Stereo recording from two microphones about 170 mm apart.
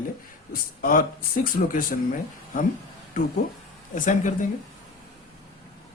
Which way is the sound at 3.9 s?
50° left (ahead or behind).